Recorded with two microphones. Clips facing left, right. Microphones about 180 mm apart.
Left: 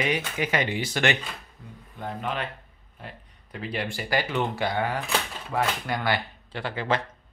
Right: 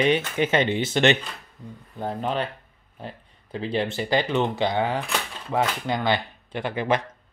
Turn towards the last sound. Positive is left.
turn(degrees=-20)  # may be behind; listen again after turning